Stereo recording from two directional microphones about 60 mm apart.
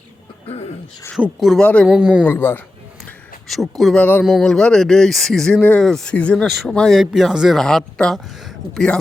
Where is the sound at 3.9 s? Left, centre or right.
Left.